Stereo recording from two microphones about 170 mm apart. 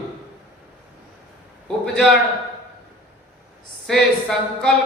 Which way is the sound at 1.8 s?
5° left (ahead or behind).